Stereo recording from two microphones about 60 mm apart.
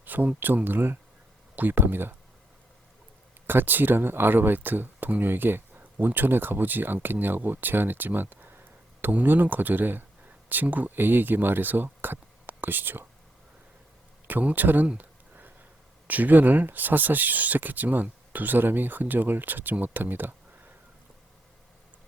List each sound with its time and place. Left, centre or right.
0.0 s speech: right
3.4 s speech: right
14.3 s speech: right
14.9 s a sound: right
16.0 s speech: right